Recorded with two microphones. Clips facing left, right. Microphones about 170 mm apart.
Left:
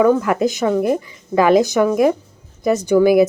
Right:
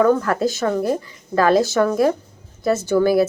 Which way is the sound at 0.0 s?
15° left (ahead or behind).